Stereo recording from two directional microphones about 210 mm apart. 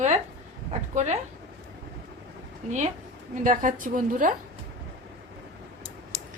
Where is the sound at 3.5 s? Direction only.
40° right (ahead or behind).